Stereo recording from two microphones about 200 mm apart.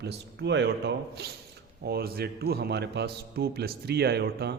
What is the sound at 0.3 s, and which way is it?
A man's voice, 60° right (ahead or behind).